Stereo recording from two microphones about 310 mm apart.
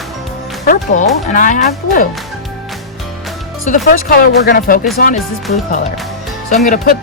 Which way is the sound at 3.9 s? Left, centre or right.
Left.